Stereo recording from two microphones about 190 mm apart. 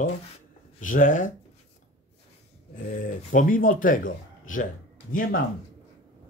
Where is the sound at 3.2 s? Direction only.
45° left (ahead or behind).